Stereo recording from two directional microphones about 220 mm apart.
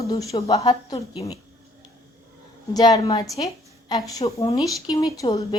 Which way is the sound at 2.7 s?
15° left (ahead or behind).